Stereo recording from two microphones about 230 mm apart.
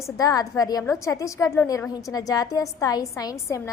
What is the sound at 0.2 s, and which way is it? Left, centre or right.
A woman's voice, centre.